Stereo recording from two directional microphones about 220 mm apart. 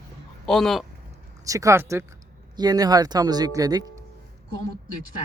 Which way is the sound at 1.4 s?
15° right (ahead or behind).